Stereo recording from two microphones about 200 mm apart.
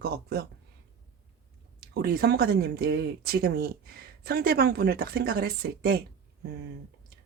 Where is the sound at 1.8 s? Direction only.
55° right (ahead or behind).